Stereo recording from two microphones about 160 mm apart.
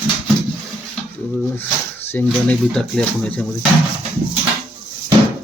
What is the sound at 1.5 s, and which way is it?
Speech, 15° left (ahead or behind).